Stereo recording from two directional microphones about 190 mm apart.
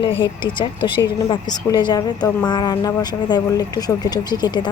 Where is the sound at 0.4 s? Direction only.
25° left (ahead or behind).